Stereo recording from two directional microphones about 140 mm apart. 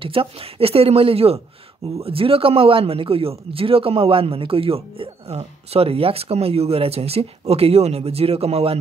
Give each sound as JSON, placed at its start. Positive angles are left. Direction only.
{"t": 0.0, "sound": "speech", "side_deg": -40}